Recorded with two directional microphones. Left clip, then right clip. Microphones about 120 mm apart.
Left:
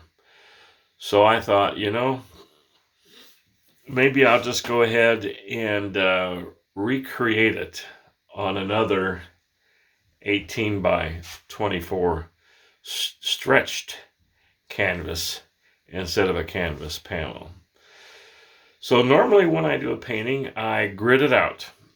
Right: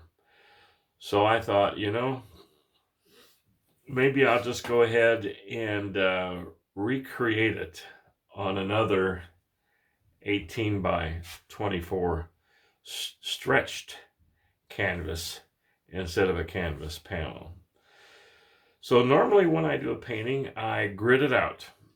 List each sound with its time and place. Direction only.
0.4 s speech: 35° left (ahead or behind)
3.8 s speech: 40° left (ahead or behind)
8.7 s speech: 20° left (ahead or behind)
10.2 s speech: 35° left (ahead or behind)